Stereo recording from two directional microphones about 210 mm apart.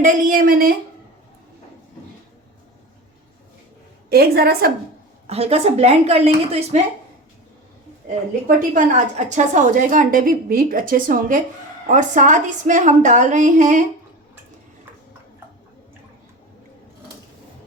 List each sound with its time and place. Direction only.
0.0 s a sound: 45° right (ahead or behind)
4.1 s a woman's voice: 50° right (ahead or behind)
5.3 s speech: 30° right (ahead or behind)
8.4 s a woman's voice: 40° right (ahead or behind)